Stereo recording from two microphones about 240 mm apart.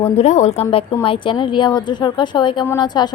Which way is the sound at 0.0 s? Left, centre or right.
Left.